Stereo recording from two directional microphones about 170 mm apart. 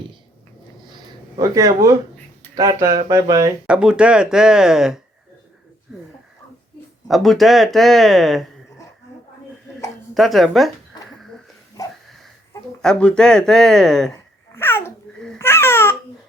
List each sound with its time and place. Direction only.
1.4 s speech: 20° right (ahead or behind)
3.7 s speech: 5° right (ahead or behind)
7.1 s speech: centre (ahead or behind)
10.2 s speech: centre (ahead or behind)
11.8 s a sound: 20° left (ahead or behind)
12.8 s speech: 5° left (ahead or behind)
14.5 s babbling: 15° left (ahead or behind)
15.4 s baby cry: 15° left (ahead or behind)